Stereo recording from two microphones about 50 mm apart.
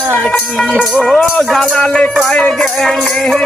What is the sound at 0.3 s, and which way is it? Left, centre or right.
Speech, centre.